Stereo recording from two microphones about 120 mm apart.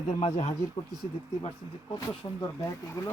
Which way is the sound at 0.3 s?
70° left (ahead or behind).